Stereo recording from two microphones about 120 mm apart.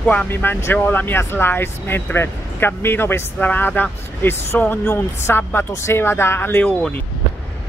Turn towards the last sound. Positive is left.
turn(degrees=10)  # may be behind; listen again after turning